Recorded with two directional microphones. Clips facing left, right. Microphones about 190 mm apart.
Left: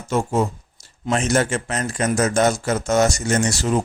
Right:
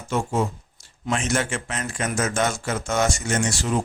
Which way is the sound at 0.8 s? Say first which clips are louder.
Left 4 dB; 40° left (ahead or behind).